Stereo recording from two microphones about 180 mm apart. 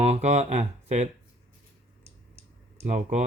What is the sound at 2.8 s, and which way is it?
Speech, 40° right (ahead or behind).